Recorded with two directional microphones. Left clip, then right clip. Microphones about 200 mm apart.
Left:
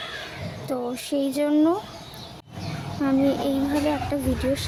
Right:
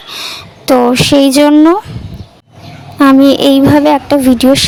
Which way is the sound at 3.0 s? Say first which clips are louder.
Right 17 dB; 50° right (ahead or behind).